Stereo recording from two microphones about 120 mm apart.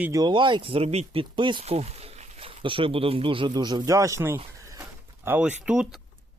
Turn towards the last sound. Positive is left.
turn(degrees=-5)  # may be behind; listen again after turning